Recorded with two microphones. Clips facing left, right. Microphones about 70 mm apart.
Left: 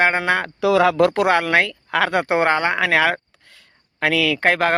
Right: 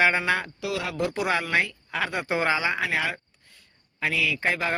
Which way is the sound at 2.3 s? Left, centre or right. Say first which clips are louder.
Left 7 dB; left.